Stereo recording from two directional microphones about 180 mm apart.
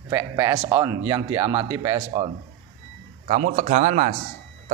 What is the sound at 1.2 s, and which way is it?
Speech, 30° right (ahead or behind).